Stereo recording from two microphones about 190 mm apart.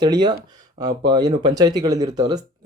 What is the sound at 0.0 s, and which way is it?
Speech, 20° right (ahead or behind).